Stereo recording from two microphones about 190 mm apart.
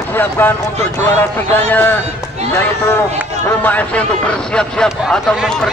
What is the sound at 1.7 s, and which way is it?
Speech, 10° left (ahead or behind).